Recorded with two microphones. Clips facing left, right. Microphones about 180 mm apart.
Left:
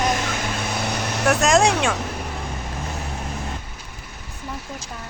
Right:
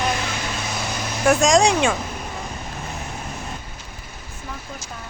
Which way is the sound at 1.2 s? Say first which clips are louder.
Right 2 dB; centre (ahead or behind).